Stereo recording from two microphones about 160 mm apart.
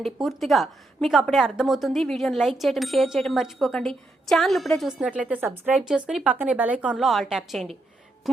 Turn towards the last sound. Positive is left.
turn(degrees=0)  # may be behind; listen again after turning